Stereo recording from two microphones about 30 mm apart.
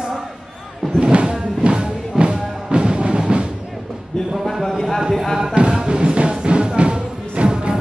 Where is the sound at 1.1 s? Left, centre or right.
Right.